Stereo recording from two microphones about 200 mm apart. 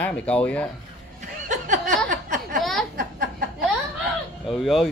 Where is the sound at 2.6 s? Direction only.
Centre (ahead or behind).